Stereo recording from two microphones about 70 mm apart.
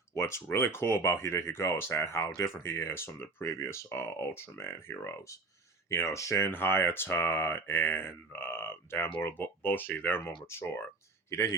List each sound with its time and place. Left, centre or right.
0.2 s speech: left
2.5 s speech: left
3.5 s speech: left